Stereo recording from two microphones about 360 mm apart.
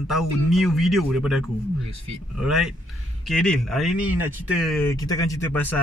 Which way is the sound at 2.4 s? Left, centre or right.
Centre.